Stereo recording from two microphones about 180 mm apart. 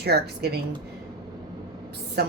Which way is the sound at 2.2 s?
60° right (ahead or behind).